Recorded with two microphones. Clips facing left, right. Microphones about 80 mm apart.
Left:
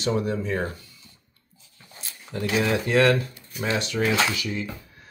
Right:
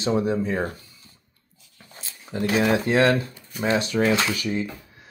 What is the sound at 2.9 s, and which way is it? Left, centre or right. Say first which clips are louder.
Speech: left 2 dB; right.